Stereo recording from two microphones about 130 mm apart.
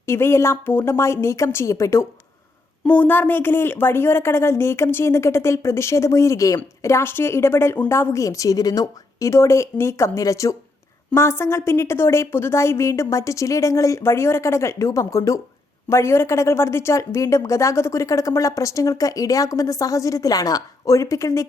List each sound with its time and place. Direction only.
0.0 s speech: 20° left (ahead or behind)
2.8 s speech: 10° left (ahead or behind)